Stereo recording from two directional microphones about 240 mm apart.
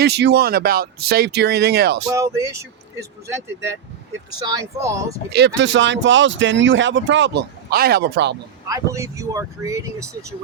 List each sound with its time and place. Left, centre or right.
0.0 s speech: right
2.1 s speech: centre
4.4 s speech: centre
5.5 s speech: right
8.6 s speech: centre